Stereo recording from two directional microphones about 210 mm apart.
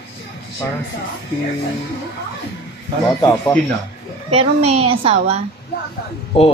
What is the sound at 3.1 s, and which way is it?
Speech, 20° left (ahead or behind).